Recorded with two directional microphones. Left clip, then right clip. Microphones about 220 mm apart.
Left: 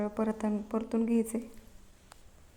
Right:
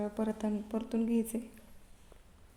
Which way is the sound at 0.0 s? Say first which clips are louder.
Left 3 dB; centre (ahead or behind).